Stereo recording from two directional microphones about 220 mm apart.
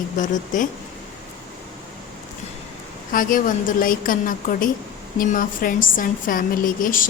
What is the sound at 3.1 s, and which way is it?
A woman's voice, 35° left (ahead or behind).